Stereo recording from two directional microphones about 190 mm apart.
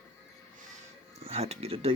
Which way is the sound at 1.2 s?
35° right (ahead or behind).